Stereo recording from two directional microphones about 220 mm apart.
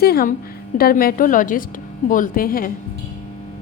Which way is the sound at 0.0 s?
45° left (ahead or behind).